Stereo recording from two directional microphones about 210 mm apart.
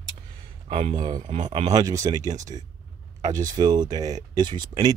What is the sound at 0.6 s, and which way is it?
Speech, 30° right (ahead or behind).